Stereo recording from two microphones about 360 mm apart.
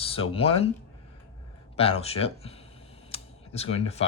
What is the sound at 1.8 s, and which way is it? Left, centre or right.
Speech, centre.